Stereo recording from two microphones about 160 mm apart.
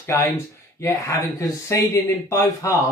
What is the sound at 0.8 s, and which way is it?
Speech, 20° left (ahead or behind).